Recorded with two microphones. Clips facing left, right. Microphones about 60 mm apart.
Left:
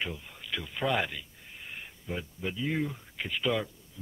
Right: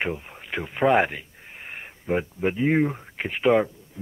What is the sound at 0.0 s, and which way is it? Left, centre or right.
Speech, right.